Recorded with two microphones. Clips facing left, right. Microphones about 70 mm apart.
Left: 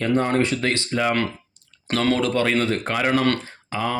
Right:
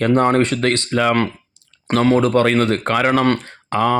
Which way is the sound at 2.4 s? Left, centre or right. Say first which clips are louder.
Right 5 dB; right.